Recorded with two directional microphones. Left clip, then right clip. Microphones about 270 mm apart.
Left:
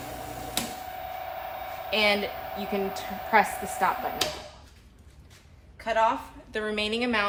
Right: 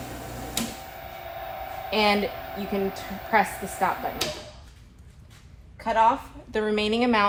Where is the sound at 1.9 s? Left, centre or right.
Centre.